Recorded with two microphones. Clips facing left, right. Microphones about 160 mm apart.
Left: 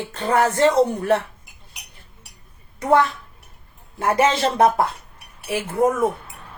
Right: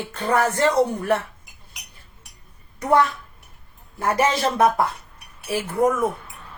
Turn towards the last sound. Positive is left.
turn(degrees=25)  # may be behind; listen again after turning